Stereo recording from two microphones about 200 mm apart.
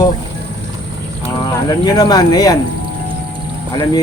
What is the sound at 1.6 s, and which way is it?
Speech, 20° left (ahead or behind).